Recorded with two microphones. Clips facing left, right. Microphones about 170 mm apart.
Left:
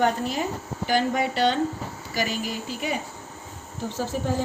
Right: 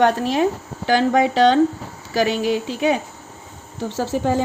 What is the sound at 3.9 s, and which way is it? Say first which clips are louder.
Speech: right 7 dB; 80° right.